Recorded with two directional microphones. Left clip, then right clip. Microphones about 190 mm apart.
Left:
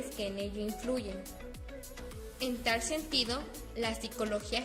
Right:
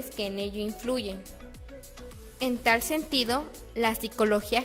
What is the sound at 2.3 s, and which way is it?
A woman's voice, 45° right (ahead or behind).